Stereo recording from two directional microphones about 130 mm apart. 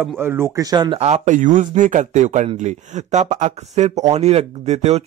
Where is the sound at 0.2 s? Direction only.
20° right (ahead or behind).